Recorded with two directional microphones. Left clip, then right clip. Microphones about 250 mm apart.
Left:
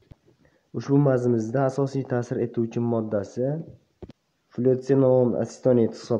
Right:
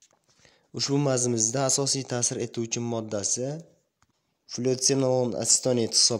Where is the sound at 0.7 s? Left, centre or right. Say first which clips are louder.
Left 4 dB; right.